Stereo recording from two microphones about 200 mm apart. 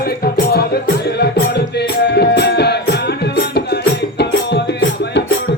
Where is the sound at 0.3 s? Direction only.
50° left (ahead or behind).